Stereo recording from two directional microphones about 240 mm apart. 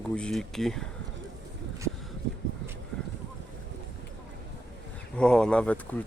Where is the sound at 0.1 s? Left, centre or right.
Centre.